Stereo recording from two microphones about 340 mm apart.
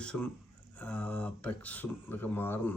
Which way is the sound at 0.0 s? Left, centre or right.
Centre.